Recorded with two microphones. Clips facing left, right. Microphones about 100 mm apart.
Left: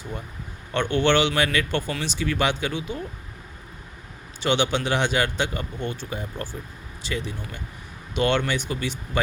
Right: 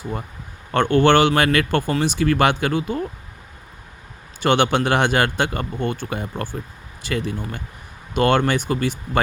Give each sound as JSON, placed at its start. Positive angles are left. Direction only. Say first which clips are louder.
{"t": 0.7, "sound": "a man's voice", "louder": "right 6 dB", "side_deg": -50}
{"t": 4.4, "sound": "a man's voice", "louder": "right 5 dB", "side_deg": -55}